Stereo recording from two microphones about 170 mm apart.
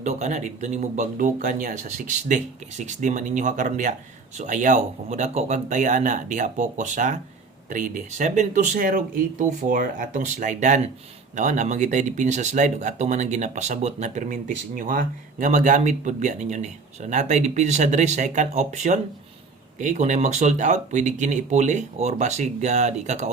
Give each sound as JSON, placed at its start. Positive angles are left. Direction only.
{"t": 0.0, "sound": "speech", "side_deg": -40}